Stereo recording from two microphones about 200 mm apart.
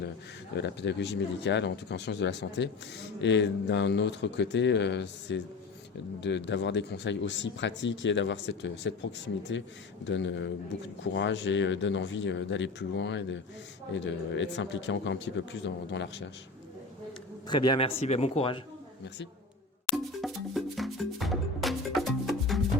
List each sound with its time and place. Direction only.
0.5 s speech: 60° left (ahead or behind)
17.5 s speech: 20° left (ahead or behind)
20.2 s music: centre (ahead or behind)